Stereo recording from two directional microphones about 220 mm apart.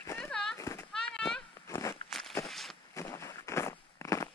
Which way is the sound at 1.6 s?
15° left (ahead or behind).